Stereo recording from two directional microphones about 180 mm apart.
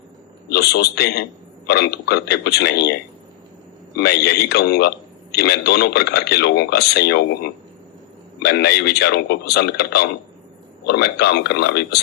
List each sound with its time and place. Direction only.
0.4 s a man's voice: 65° left (ahead or behind)
3.9 s a man's voice: 65° left (ahead or behind)